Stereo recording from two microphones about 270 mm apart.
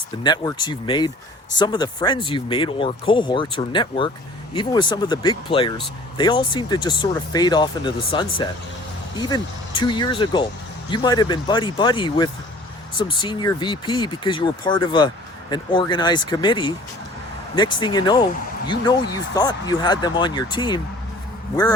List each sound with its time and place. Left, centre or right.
0.2 s speech: centre